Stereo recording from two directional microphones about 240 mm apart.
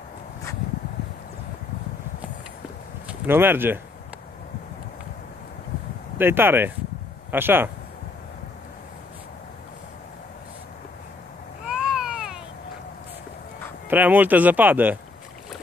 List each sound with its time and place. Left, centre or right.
3.1 s speech: centre
6.1 s speech: centre
11.6 s baby cry: centre
13.8 s speech: centre